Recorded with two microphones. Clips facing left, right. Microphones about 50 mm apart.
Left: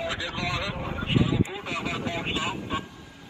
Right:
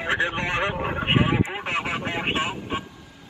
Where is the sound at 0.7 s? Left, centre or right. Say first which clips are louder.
Right 5 dB; right.